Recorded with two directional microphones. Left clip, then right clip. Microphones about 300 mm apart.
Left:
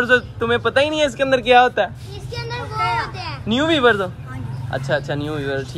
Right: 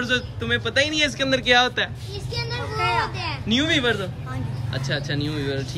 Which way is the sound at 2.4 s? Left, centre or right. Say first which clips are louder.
Left 3 dB; left.